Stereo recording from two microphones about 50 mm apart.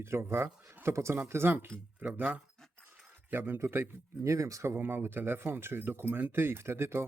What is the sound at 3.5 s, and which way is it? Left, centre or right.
Speech, right.